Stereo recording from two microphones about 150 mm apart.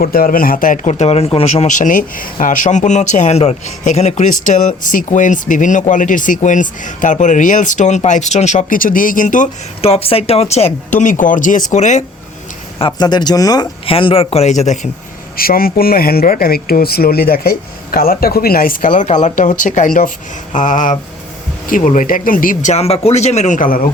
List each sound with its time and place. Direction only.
0.0 s a man's voice: 80° left; by 9.5 s 60° left (ahead or behind)
9.8 s speech: 40° left (ahead or behind)
12.8 s speech: 30° left (ahead or behind)
13.8 s a man's voice: 40° left (ahead or behind)
15.4 s a man's voice: 80° left